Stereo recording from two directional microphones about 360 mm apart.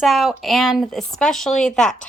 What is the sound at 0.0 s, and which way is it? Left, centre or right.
A woman's voice, centre.